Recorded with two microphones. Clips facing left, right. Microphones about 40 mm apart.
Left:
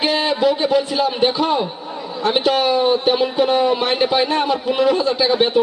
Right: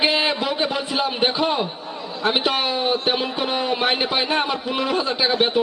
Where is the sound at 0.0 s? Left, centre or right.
Centre.